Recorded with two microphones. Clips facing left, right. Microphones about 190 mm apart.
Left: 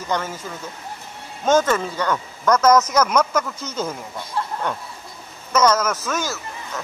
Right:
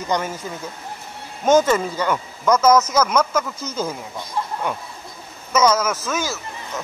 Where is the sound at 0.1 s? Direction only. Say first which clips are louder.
Right 2 dB; 15° right (ahead or behind).